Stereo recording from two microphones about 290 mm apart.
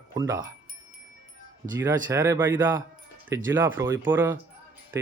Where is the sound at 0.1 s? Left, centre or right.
Centre.